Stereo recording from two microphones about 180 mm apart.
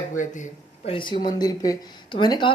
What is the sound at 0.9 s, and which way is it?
Speech, 25° left (ahead or behind).